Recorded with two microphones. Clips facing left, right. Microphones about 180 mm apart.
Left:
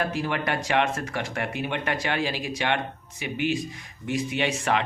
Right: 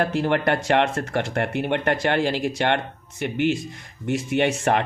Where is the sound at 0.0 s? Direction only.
60° right (ahead or behind).